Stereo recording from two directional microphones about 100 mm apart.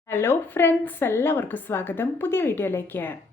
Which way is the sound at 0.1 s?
25° left (ahead or behind).